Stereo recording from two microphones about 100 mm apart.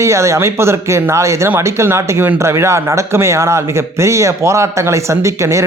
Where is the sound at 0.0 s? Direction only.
30° right (ahead or behind).